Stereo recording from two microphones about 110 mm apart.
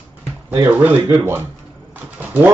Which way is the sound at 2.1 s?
15° right (ahead or behind).